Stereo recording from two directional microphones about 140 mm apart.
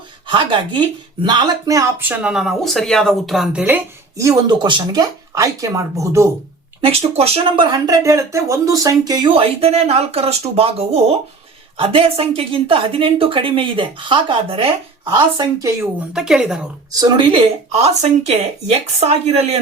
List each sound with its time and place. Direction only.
0.3 s speech: 35° right (ahead or behind); by 4.3 s 15° right (ahead or behind)
4.3 s speech: 30° right (ahead or behind)
6.8 s speech: 45° right (ahead or behind)
16.1 s a woman's voice: 5° right (ahead or behind)
16.9 s speech: 30° right (ahead or behind)
17.7 s speech: 50° right (ahead or behind)